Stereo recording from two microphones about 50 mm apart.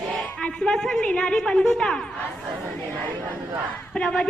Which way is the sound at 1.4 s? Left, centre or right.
Centre.